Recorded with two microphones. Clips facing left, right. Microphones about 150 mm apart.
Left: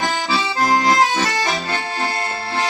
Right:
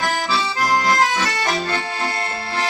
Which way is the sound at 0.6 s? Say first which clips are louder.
Left 3 dB; 20° left (ahead or behind).